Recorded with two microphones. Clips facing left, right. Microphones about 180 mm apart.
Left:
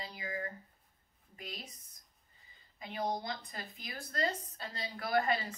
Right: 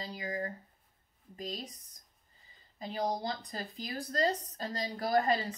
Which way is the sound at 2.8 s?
35° right (ahead or behind).